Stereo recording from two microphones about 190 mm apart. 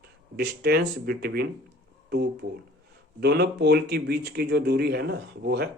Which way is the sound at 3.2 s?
65° right (ahead or behind).